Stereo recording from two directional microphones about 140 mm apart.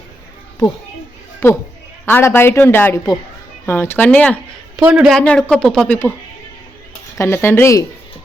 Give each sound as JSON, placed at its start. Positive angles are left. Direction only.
{"t": 1.4, "sound": "speech", "side_deg": 15}
{"t": 4.8, "sound": "speech", "side_deg": -5}
{"t": 7.2, "sound": "speech", "side_deg": 20}